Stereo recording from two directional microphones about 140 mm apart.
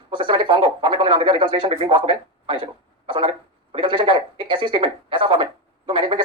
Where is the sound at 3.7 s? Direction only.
35° right (ahead or behind).